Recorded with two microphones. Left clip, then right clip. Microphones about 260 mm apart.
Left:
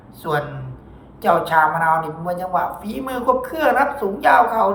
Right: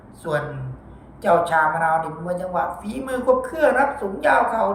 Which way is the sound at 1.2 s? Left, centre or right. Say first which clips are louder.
Left 2 dB; centre.